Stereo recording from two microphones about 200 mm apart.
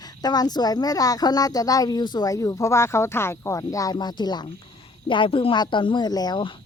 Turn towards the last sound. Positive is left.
turn(degrees=25)  # may be behind; listen again after turning